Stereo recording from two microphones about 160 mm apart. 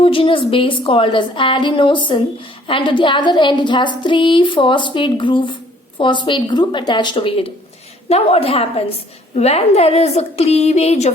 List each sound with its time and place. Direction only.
0.0 s a woman's voice: 35° left (ahead or behind)